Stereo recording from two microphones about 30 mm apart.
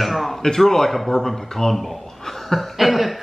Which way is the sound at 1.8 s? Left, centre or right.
Centre.